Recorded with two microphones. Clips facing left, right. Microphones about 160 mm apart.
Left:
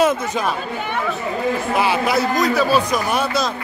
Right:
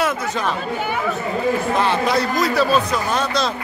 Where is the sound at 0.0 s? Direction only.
20° left (ahead or behind).